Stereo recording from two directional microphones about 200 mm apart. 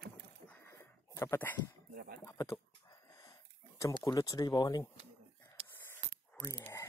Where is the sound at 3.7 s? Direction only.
15° left (ahead or behind).